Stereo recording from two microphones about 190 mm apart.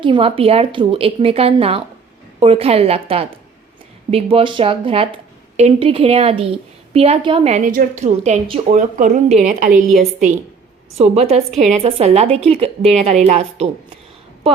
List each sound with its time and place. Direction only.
0.0 s a woman's voice: 25° right (ahead or behind)